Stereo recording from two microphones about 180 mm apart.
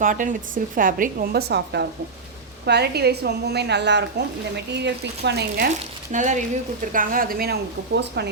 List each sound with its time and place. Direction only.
0.0 s a woman's voice: 45° right (ahead or behind); by 5.6 s 65° right (ahead or behind)
6.1 s a woman's voice: 45° right (ahead or behind); by 8.3 s 70° right (ahead or behind)